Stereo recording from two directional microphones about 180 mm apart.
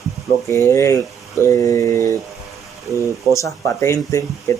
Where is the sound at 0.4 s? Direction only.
15° left (ahead or behind).